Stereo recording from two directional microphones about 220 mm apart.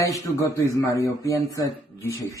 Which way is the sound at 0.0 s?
15° left (ahead or behind).